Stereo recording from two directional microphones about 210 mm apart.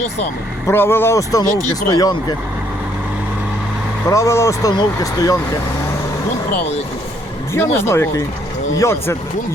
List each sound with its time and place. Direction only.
0.7 s speech: 10° left (ahead or behind)
1.5 s speech: 35° left (ahead or behind)
1.9 s speech: 20° left (ahead or behind)
4.1 s speech: 15° left (ahead or behind)
7.5 s speech: 10° left (ahead or behind)